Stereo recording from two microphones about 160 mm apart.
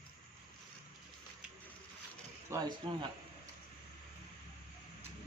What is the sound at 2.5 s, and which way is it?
Speech, 25° right (ahead or behind).